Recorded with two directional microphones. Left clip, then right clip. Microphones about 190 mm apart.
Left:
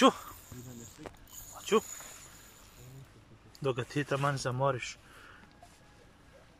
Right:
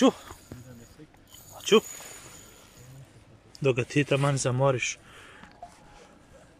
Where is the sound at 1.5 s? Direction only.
15° right (ahead or behind).